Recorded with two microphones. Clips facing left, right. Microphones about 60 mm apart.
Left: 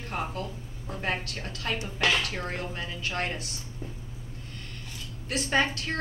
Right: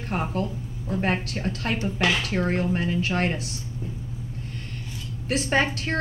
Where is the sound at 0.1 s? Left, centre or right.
Right.